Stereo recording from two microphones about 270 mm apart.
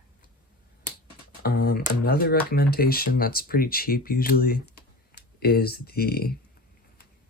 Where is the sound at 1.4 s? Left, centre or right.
Left.